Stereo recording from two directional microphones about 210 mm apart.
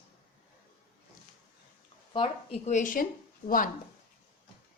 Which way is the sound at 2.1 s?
25° left (ahead or behind).